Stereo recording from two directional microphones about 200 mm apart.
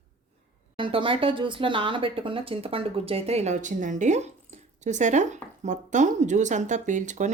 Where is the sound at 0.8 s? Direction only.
25° right (ahead or behind).